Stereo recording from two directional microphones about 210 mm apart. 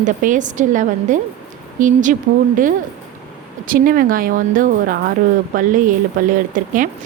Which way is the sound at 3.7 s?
40° right (ahead or behind).